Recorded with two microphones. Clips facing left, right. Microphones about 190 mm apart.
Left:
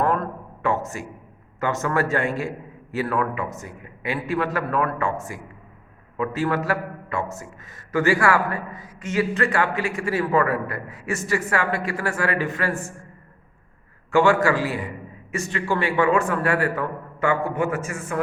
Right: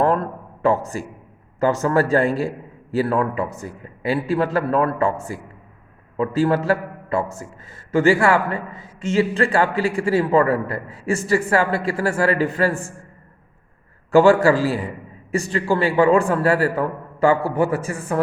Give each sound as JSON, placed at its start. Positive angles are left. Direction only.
{"t": 0.0, "sound": "a sound", "side_deg": -30}
{"t": 1.5, "sound": "a man's voice", "side_deg": -30}
{"t": 14.1, "sound": "a man's voice", "side_deg": -35}